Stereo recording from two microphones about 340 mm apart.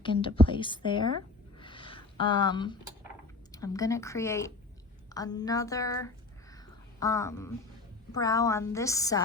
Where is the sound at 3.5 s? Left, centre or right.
Centre.